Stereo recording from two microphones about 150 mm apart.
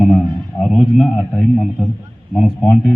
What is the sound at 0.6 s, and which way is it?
A man's voice, centre (ahead or behind).